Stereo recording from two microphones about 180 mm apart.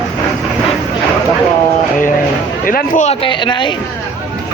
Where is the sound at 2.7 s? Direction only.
50° left (ahead or behind); by 3.7 s 25° left (ahead or behind).